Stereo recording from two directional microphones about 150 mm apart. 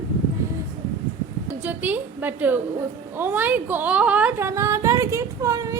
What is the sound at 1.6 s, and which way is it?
A woman's voice, 10° right (ahead or behind).